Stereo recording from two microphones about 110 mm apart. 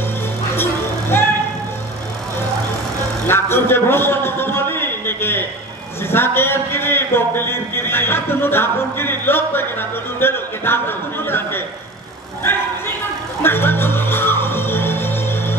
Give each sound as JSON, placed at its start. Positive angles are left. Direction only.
{"t": 3.3, "sound": "a man's voice", "side_deg": 20}
{"t": 13.4, "sound": "music", "side_deg": 20}